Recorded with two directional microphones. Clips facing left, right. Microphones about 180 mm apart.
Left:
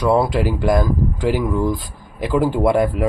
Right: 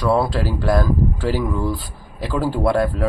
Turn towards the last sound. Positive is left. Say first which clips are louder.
# left 2 dB
turn(degrees=15)  # may be behind; listen again after turning